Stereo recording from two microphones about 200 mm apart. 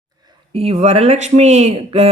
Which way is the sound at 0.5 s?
30° right (ahead or behind).